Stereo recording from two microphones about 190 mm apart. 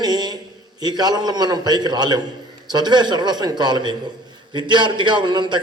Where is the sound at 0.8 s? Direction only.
20° right (ahead or behind).